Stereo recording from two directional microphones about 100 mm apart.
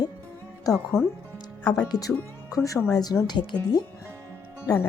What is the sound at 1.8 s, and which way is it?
Speech, 40° left (ahead or behind).